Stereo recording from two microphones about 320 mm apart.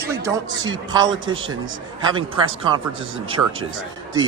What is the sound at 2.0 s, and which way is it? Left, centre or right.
Speech, centre.